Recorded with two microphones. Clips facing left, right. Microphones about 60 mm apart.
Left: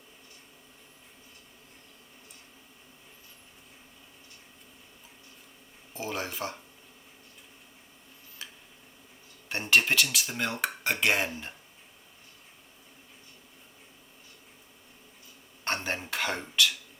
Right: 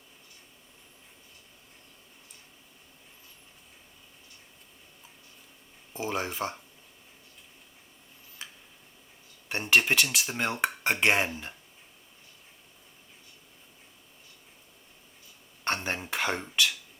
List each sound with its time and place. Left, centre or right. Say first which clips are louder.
5.9 s speech: right 3 dB; right
9.5 s speech: right 1 dB; right
15.7 s dishes: even; right